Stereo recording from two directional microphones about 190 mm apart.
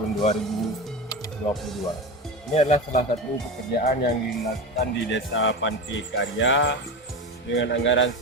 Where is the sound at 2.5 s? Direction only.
35° left (ahead or behind).